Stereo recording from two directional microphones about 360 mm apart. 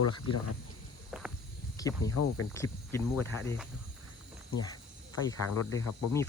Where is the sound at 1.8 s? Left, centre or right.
Centre.